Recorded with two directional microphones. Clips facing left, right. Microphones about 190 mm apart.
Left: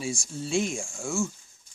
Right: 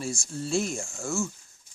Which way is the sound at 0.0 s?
Centre (ahead or behind).